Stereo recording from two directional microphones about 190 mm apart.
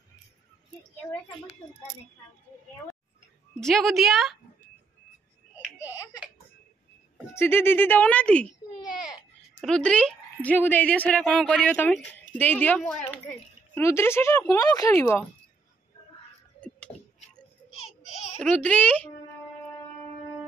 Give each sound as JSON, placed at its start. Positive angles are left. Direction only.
{"t": 3.6, "sound": "a woman's voice", "side_deg": 0}
{"t": 5.6, "sound": "a sound", "side_deg": -10}
{"t": 7.3, "sound": "a woman's voice", "side_deg": 10}
{"t": 9.6, "sound": "a woman's voice", "side_deg": 5}
{"t": 16.9, "sound": "a sound", "side_deg": 20}
{"t": 17.7, "sound": "baby cry", "side_deg": 30}
{"t": 18.4, "sound": "a woman's voice", "side_deg": 5}